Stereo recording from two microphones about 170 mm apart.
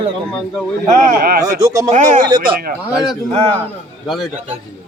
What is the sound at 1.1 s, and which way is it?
Speech, 60° right (ahead or behind).